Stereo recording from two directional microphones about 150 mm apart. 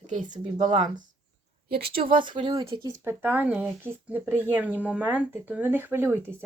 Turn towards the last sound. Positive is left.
turn(degrees=-15)  # may be behind; listen again after turning